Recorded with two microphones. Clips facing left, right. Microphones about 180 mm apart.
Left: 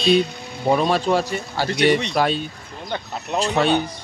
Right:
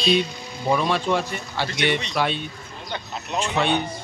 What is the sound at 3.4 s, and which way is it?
Speech, 40° left (ahead or behind).